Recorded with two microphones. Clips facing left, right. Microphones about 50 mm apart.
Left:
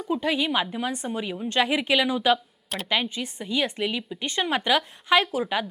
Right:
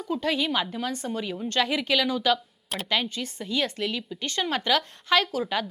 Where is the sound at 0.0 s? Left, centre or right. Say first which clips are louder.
Left 1 dB; centre.